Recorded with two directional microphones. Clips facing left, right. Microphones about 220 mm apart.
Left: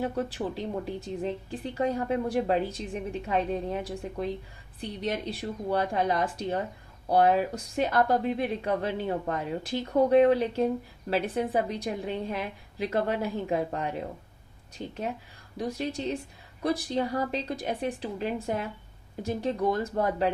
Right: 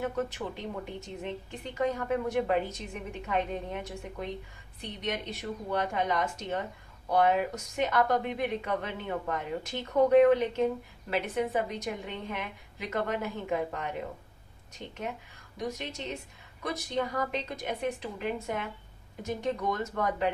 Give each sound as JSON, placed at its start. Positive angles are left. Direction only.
{"t": 0.0, "sound": "speech", "side_deg": 35}
{"t": 15.5, "sound": "speech", "side_deg": 30}